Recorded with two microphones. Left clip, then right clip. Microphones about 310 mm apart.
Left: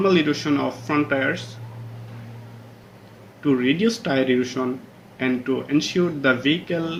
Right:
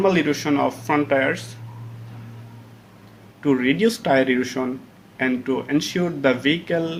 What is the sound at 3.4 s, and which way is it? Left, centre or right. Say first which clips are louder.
Speech: right 1 dB; right.